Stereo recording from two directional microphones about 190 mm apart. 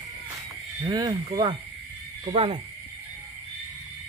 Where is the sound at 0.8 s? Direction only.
20° right (ahead or behind).